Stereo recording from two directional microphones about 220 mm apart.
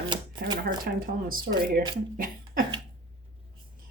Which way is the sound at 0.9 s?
40° right (ahead or behind).